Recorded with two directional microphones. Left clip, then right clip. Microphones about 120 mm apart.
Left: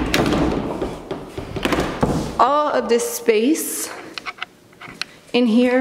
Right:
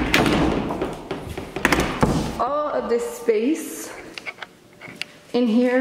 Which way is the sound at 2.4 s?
35° left (ahead or behind).